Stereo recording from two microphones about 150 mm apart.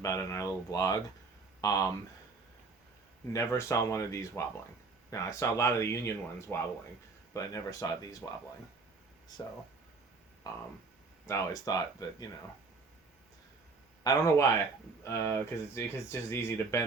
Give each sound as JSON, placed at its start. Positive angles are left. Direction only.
{"t": 0.0, "sound": "speech", "side_deg": 20}
{"t": 3.3, "sound": "speech", "side_deg": 20}
{"t": 11.3, "sound": "speech", "side_deg": 20}
{"t": 14.0, "sound": "speech", "side_deg": 25}